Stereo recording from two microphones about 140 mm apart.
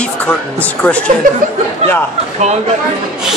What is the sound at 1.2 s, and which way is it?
Speech, 75° right (ahead or behind).